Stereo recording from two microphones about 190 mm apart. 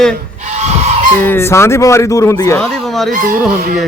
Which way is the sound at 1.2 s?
10° left (ahead or behind).